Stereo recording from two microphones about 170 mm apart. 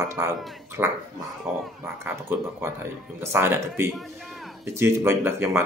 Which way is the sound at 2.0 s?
15° right (ahead or behind).